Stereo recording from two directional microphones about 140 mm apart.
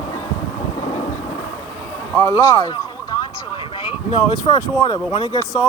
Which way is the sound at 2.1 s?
15° left (ahead or behind).